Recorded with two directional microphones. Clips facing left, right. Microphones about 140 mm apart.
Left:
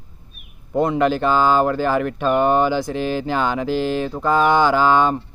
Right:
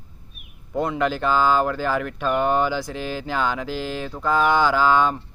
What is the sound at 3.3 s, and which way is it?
Speech, 20° left (ahead or behind).